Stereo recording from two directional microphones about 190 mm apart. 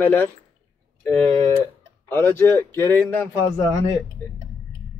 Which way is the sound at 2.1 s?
10° left (ahead or behind).